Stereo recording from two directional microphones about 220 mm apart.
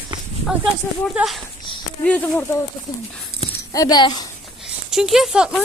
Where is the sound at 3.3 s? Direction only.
45° right (ahead or behind).